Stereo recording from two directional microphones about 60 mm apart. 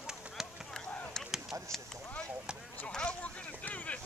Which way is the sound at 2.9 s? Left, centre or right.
Centre.